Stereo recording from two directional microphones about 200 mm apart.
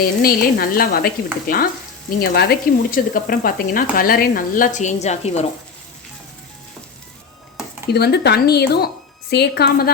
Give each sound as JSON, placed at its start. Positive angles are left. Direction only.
{"t": 0.0, "sound": "stir", "side_deg": 45}
{"t": 3.9, "sound": "speech", "side_deg": 45}
{"t": 7.9, "sound": "stir", "side_deg": 55}